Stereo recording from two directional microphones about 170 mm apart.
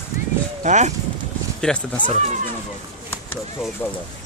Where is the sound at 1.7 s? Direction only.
5° left (ahead or behind).